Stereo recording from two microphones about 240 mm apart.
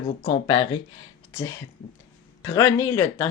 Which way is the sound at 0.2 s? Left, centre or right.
Centre.